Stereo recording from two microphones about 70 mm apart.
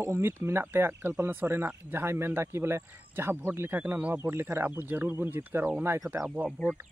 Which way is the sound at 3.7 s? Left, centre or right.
Right.